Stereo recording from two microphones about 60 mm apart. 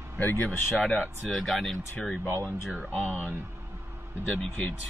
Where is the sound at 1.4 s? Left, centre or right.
Centre.